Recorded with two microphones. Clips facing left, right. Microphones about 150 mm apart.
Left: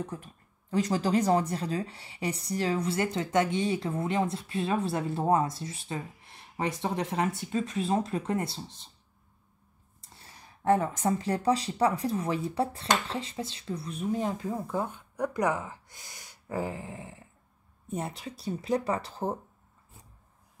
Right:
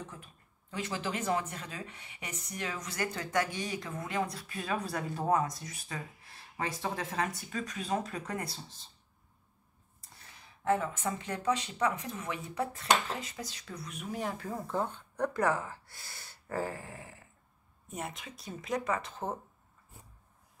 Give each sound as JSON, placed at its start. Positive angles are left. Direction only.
{"t": 0.0, "sound": "speech", "side_deg": 40}
{"t": 10.0, "sound": "a sound", "side_deg": 25}
{"t": 10.3, "sound": "speech", "side_deg": 40}